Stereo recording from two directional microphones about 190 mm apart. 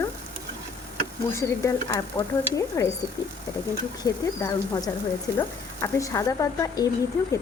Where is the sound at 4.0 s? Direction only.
20° left (ahead or behind).